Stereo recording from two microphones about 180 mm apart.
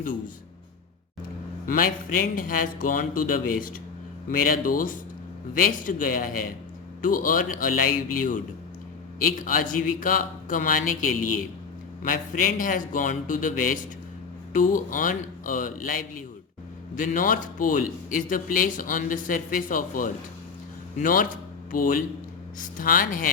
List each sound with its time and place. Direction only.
1.6 s a man's voice: 50° left (ahead or behind)